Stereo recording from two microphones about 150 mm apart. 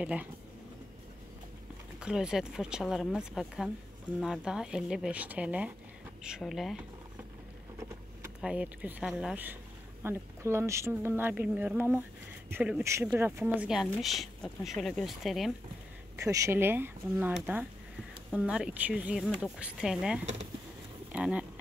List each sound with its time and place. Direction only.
0.0 s speech: 10° right (ahead or behind)
2.0 s speech: 5° right (ahead or behind)
8.4 s speech: 5° right (ahead or behind)
13.8 s speech: centre (ahead or behind)
16.2 s speech: 20° right (ahead or behind)
18.3 s speech: 5° right (ahead or behind)